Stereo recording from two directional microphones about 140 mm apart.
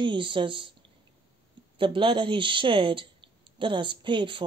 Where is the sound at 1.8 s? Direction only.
35° right (ahead or behind).